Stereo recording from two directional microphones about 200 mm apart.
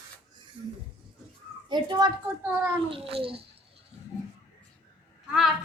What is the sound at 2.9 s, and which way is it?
Babbling, 30° right (ahead or behind).